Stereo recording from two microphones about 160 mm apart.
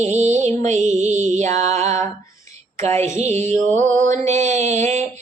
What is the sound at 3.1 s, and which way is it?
Mantra, 45° right (ahead or behind).